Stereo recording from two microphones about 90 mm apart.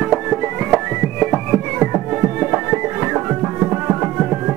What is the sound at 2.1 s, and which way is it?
Music, 25° right (ahead or behind).